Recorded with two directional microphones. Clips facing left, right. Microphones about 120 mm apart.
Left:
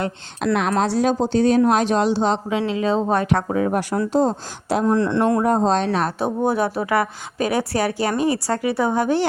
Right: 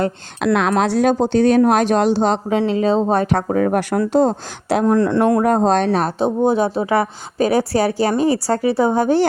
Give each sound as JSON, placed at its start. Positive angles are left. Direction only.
{"t": 0.4, "sound": "a woman's voice", "side_deg": -90}
{"t": 0.7, "sound": "speech", "side_deg": -60}
{"t": 4.9, "sound": "speech", "side_deg": -45}
{"t": 5.4, "sound": "speech", "side_deg": -60}
{"t": 6.1, "sound": "a woman's voice", "side_deg": -25}